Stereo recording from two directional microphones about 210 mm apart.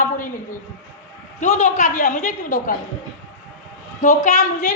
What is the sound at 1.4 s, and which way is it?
A woman's voice, 35° left (ahead or behind).